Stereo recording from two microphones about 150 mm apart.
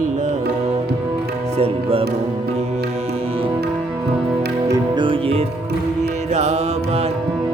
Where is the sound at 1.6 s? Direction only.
40° right (ahead or behind).